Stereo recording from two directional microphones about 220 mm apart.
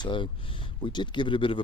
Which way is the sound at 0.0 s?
20° left (ahead or behind).